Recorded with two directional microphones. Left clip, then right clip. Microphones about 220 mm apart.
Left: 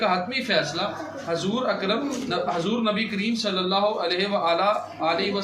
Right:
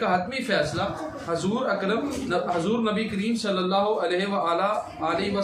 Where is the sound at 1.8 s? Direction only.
15° right (ahead or behind).